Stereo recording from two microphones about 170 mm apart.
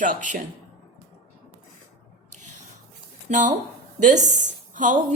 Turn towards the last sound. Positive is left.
turn(degrees=-45)  # may be behind; listen again after turning